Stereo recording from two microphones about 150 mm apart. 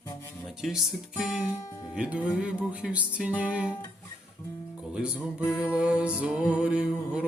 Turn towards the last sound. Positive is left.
turn(degrees=-5)  # may be behind; listen again after turning